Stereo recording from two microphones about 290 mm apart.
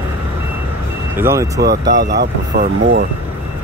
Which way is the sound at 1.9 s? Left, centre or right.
Right.